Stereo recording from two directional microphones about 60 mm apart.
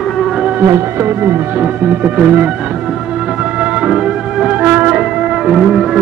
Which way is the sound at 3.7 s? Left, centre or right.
Centre.